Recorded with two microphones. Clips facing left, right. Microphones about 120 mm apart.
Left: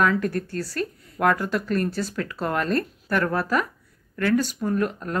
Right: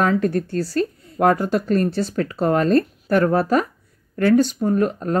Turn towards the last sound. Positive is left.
turn(degrees=-30)  # may be behind; listen again after turning